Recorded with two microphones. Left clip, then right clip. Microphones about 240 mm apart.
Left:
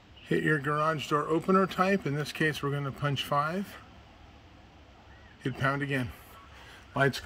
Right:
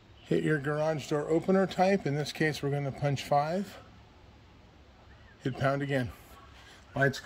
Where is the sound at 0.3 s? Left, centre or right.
Centre.